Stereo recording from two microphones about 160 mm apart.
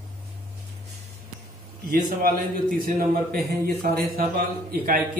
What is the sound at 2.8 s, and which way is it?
A man's voice, 70° right (ahead or behind).